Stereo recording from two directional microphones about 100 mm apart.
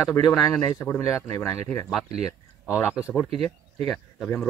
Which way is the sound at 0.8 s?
25° left (ahead or behind).